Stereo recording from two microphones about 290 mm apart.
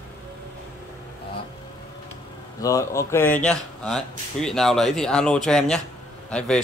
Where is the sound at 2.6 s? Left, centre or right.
Centre.